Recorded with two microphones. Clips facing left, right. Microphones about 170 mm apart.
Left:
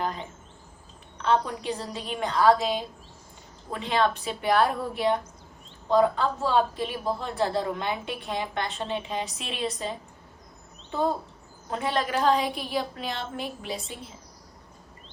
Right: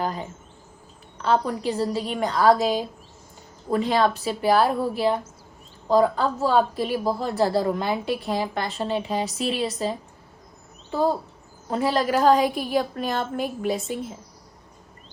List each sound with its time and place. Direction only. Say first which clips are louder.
0.0 s insect: right 3 dB; 35° right (ahead or behind)
1.2 s a woman's voice: right 3 dB; 35° right (ahead or behind)
11.7 s a woman's voice: right 5 dB; 35° right (ahead or behind)